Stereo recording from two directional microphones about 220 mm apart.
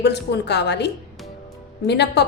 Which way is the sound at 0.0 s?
50° left (ahead or behind).